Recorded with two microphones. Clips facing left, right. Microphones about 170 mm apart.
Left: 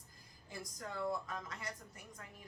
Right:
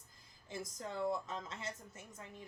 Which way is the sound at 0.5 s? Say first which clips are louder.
Right 3 dB; 25° right (ahead or behind).